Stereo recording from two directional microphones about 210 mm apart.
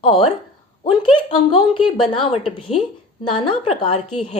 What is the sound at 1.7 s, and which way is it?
Speech, 25° left (ahead or behind).